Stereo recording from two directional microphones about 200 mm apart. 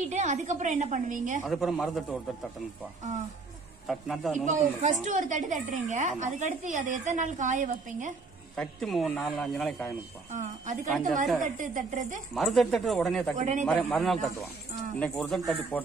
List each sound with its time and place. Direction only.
0.0 s a woman's voice: 35° right (ahead or behind)
1.4 s speech: centre (ahead or behind)
3.8 s speech: centre (ahead or behind)
4.5 s a woman's voice: 40° right (ahead or behind)
8.5 s speech: centre (ahead or behind)
10.3 s a woman's voice: 35° right (ahead or behind)
12.4 s speech: centre (ahead or behind)
13.4 s a woman's voice: 35° right (ahead or behind)
13.7 s speech: 5° left (ahead or behind)